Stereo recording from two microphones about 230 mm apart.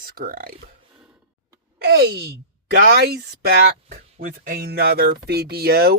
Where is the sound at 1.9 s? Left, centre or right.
Right.